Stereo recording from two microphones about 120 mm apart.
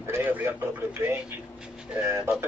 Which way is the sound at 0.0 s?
15° right (ahead or behind).